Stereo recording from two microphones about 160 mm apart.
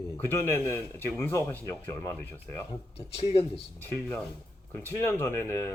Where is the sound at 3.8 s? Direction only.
15° left (ahead or behind).